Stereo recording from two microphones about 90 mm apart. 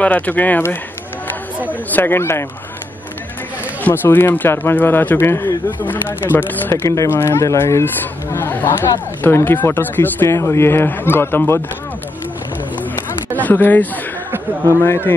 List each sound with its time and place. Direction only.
0.0 s speech: 20° left (ahead or behind)
3.8 s speech: 20° left (ahead or behind)
13.4 s speech: 20° left (ahead or behind)